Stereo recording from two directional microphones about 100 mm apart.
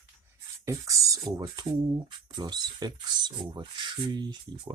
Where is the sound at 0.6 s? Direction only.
35° right (ahead or behind).